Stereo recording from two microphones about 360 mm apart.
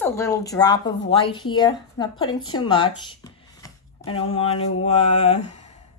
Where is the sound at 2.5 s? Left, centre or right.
Centre.